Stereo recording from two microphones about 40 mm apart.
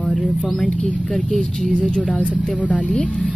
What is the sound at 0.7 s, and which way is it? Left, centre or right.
Speech, left.